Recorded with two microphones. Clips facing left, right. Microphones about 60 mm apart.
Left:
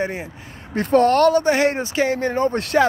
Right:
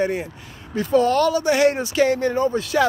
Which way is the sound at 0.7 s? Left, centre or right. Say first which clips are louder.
Left 2 dB; left.